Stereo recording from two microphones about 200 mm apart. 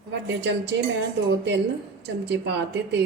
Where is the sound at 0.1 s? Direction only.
60° right (ahead or behind).